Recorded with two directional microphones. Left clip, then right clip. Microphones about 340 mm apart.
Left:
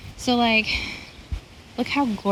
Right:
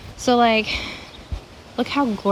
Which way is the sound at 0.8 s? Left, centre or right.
Centre.